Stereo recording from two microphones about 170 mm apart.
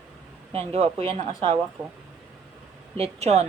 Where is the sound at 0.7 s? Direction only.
35° right (ahead or behind).